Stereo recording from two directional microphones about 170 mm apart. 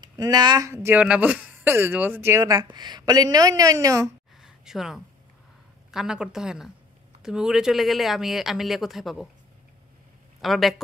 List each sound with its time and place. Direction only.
0.0 s speech: 25° right (ahead or behind)
4.4 s a sound: centre (ahead or behind)
5.9 s speech: 5° right (ahead or behind)
10.4 s speech: centre (ahead or behind)